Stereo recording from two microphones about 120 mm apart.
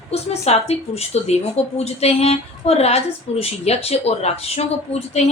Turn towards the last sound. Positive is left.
turn(degrees=60)  # may be behind; listen again after turning